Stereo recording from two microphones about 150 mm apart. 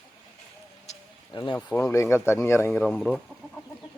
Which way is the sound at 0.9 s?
45° left (ahead or behind).